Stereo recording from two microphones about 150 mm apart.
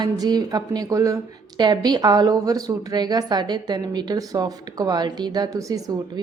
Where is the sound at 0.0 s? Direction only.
25° right (ahead or behind).